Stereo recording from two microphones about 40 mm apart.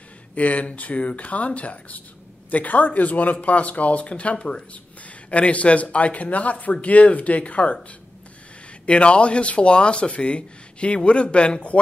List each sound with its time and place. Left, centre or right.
0.3 s speech: left
8.8 s speech: left